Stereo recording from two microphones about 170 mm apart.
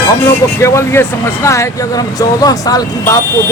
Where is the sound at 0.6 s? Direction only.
15° left (ahead or behind).